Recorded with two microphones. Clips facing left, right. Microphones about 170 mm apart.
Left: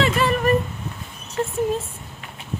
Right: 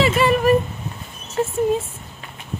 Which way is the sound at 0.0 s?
5° right (ahead or behind).